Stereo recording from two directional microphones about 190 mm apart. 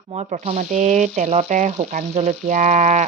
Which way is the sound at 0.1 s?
35° right (ahead or behind).